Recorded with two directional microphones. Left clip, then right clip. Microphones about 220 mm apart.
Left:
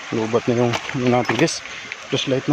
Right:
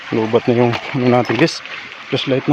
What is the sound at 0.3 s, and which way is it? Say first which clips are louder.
Speech: right 4 dB; 25° right (ahead or behind).